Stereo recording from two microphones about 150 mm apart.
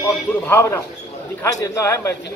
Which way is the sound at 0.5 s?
15° left (ahead or behind).